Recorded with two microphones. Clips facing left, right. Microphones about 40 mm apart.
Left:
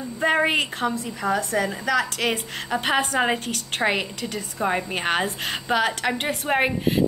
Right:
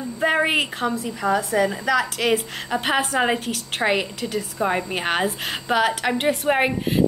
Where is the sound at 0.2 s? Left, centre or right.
Centre.